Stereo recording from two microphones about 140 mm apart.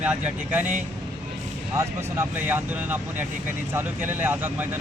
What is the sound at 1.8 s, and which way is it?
Speech, 20° right (ahead or behind).